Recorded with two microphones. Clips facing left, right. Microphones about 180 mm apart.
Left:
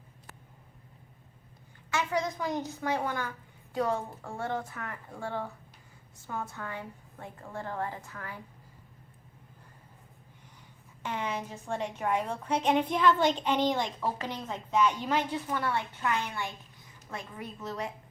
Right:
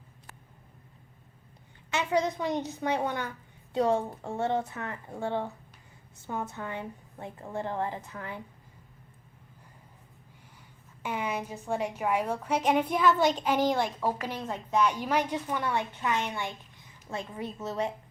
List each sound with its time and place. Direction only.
1.9 s a woman's voice: 20° right (ahead or behind)
11.0 s a woman's voice: 10° right (ahead or behind); by 17.9 s 25° right (ahead or behind)